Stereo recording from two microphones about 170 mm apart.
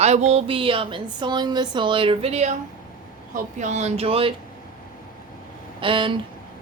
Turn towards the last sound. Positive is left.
turn(degrees=-30)  # may be behind; listen again after turning